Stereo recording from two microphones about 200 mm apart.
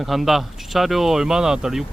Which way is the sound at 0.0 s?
Centre (ahead or behind).